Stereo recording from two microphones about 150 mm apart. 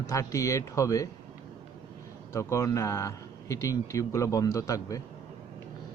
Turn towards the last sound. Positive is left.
turn(degrees=20)  # may be behind; listen again after turning